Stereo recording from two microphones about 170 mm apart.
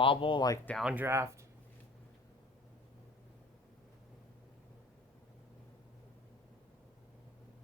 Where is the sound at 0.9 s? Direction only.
10° right (ahead or behind).